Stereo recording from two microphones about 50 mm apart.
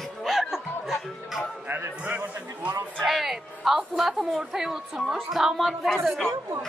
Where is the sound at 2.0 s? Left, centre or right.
Right.